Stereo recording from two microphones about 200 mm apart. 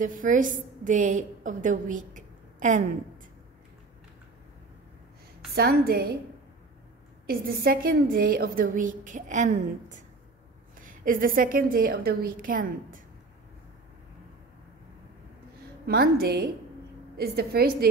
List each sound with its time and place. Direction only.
0.0 s a woman's voice: 40° right (ahead or behind)
5.5 s a woman's voice: 50° right (ahead or behind)
7.2 s a woman's voice: 50° right (ahead or behind)
15.9 s a woman's voice: 50° right (ahead or behind)